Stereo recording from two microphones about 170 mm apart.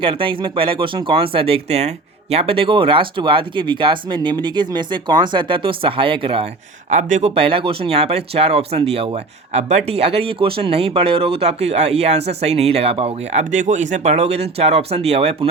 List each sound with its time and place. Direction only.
0.0 s speech: 30° right (ahead or behind)